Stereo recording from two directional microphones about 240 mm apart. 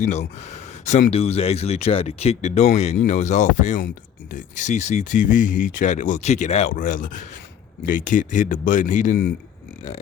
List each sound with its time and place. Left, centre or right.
0.0 s speech: left